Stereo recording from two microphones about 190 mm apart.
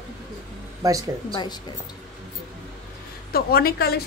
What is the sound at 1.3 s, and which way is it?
Speech, 25° left (ahead or behind).